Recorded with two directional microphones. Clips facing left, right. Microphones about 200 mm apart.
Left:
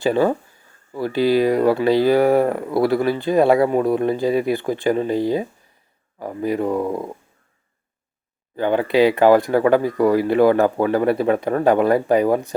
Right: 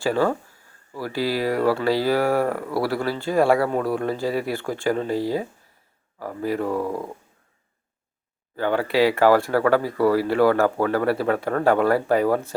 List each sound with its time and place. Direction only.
0.0 s speech: 20° left (ahead or behind)
8.5 s speech: 20° left (ahead or behind)